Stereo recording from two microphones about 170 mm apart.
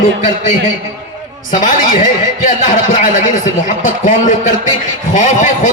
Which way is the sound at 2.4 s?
45° left (ahead or behind).